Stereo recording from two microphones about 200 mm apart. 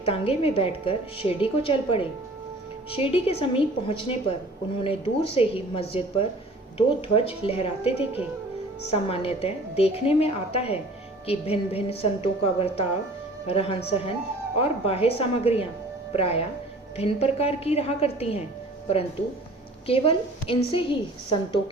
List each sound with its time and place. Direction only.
0.0 s a woman's voice: 30° left (ahead or behind)
19.9 s a woman's voice: 30° left (ahead or behind)